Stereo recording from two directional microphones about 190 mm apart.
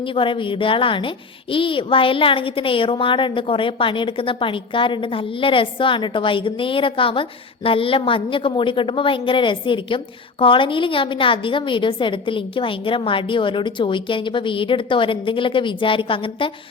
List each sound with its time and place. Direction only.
0.0 s a woman's voice: 25° left (ahead or behind)